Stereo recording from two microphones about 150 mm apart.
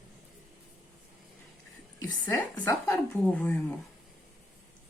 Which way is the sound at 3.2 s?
5° left (ahead or behind).